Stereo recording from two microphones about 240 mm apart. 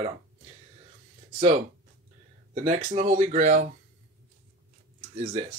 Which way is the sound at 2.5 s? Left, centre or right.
Right.